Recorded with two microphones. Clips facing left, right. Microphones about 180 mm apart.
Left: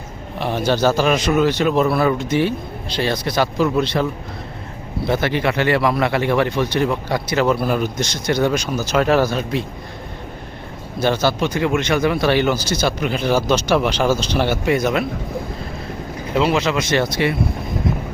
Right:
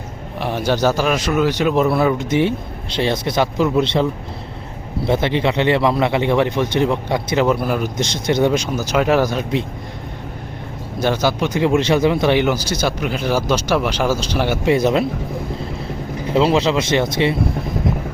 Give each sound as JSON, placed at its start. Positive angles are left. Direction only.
{"t": 0.3, "sound": "a man's voice", "side_deg": -10}
{"t": 5.0, "sound": "a man's voice", "side_deg": -25}
{"t": 7.4, "sound": "speech", "side_deg": -10}
{"t": 7.9, "sound": "a man's voice", "side_deg": -25}
{"t": 11.0, "sound": "speech", "side_deg": -15}
{"t": 14.6, "sound": "a man's voice", "side_deg": -25}
{"t": 16.3, "sound": "a man's voice", "side_deg": -30}